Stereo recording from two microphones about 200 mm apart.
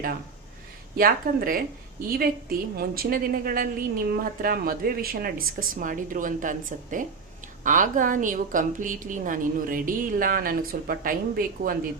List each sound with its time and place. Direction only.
0.9 s a woman's voice: 45° right (ahead or behind)